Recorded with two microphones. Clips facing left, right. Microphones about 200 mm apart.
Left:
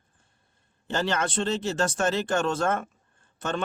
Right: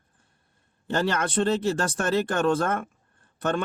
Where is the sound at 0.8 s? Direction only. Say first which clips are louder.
Right 2 dB; 55° right (ahead or behind).